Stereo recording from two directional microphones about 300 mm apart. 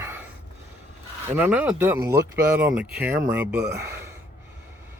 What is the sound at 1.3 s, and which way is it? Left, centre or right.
Speech, centre.